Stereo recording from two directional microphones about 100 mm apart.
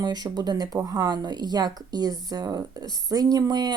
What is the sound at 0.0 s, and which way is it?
Speech, 45° right (ahead or behind).